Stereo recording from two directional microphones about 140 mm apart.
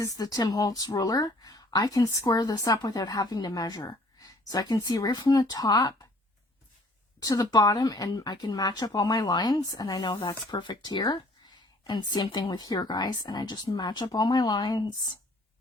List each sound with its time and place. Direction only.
0.0 s speech: 25° left (ahead or behind)
7.2 s speech: 25° left (ahead or behind)